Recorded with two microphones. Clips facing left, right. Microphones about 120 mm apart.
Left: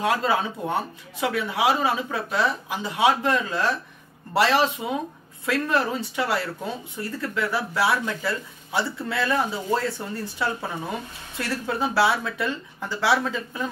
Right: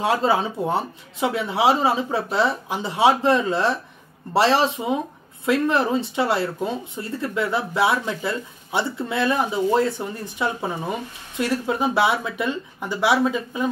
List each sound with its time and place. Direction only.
0.0 s speech: 25° right (ahead or behind)